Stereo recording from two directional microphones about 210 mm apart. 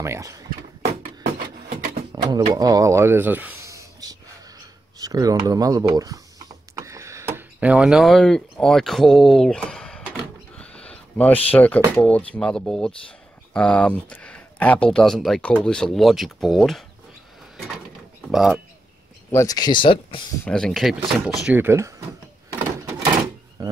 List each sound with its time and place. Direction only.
0.0 s speech: 15° right (ahead or behind)
2.1 s a sound: 20° right (ahead or behind)
2.5 s speech: 15° right (ahead or behind)
6.7 s a sound: 15° right (ahead or behind); by 11.3 s 5° left (ahead or behind)
11.5 s speech: 5° left (ahead or behind)
18.3 s speech: centre (ahead or behind)
19.3 s speech: 15° left (ahead or behind)
20.4 s speech: 5° left (ahead or behind); by 21.9 s 10° right (ahead or behind)
22.5 s door: 15° right (ahead or behind)
23.6 s a sound: 20° right (ahead or behind)